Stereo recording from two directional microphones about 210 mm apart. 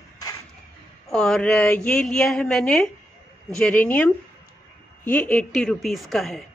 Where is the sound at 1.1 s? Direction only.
5° left (ahead or behind).